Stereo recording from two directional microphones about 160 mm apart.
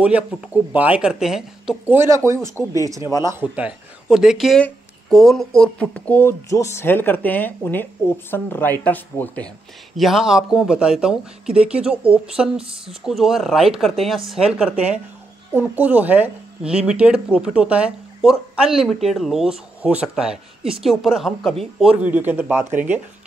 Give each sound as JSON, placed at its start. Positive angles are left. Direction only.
{"t": 0.0, "sound": "speech", "side_deg": -10}
{"t": 2.0, "sound": "speech", "side_deg": -20}
{"t": 9.9, "sound": "speech", "side_deg": 0}
{"t": 22.0, "sound": "speech", "side_deg": -10}